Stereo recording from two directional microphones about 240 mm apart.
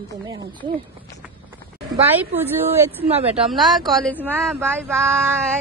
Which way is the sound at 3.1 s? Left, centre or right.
Right.